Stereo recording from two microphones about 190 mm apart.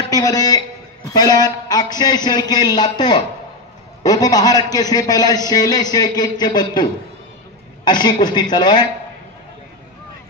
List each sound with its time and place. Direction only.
0.1 s a man's voice: 20° left (ahead or behind)